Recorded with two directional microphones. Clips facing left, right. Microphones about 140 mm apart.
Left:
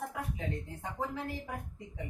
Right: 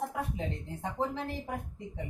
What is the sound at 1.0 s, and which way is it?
Speech, 25° right (ahead or behind).